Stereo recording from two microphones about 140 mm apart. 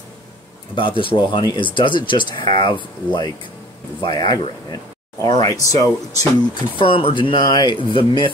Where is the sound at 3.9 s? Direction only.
35° left (ahead or behind).